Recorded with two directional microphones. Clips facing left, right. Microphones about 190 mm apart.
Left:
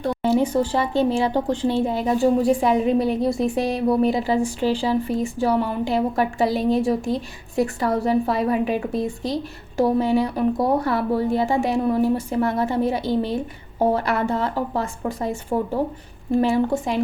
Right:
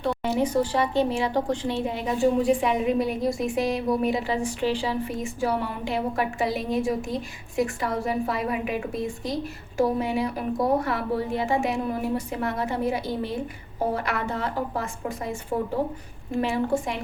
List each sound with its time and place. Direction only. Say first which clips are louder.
0.0 s a woman's voice: left 5 dB; 30° left (ahead or behind)
16.3 s a woman's voice: left 5 dB; 30° left (ahead or behind)